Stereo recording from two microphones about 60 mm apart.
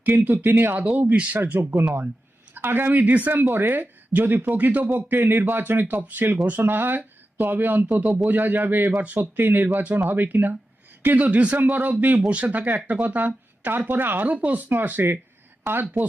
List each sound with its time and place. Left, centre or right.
0.0 s speech: right
0.8 s speech: right